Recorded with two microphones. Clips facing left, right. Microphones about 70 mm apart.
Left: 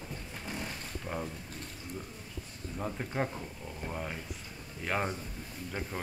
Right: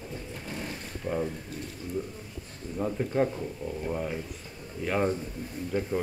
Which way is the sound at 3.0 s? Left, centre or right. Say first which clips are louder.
Right 9 dB; centre.